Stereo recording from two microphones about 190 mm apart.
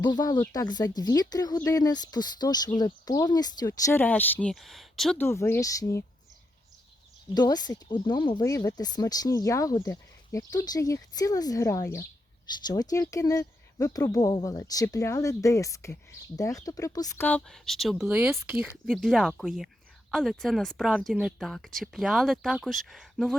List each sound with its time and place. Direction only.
0.0 s speech: 20° left (ahead or behind); by 5.2 s centre (ahead or behind)
5.2 s speech: 15° left (ahead or behind)
7.3 s speech: 20° left (ahead or behind); by 23.4 s centre (ahead or behind)